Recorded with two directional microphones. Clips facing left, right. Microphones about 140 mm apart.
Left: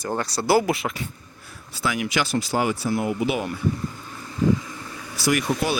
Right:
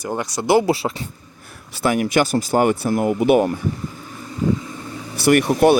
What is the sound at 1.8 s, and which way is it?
Speech, 50° right (ahead or behind).